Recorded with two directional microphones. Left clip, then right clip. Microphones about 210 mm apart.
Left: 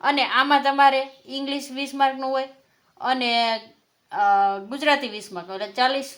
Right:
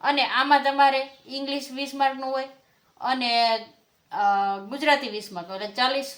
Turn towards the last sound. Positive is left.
turn(degrees=30)  # may be behind; listen again after turning